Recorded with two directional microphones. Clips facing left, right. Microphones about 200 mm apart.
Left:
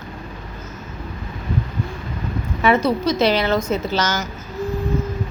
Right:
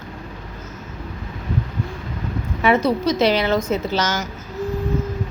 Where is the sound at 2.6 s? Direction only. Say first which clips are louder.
Even; 20° right (ahead or behind).